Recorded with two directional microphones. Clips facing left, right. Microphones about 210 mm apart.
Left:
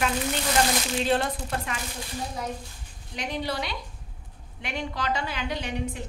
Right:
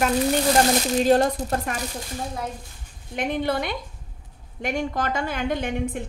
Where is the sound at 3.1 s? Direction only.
55° right (ahead or behind).